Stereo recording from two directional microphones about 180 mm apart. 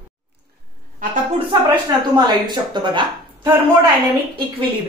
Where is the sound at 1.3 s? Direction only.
25° right (ahead or behind).